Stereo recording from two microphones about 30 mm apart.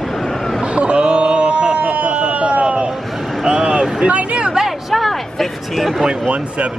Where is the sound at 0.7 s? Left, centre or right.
Right.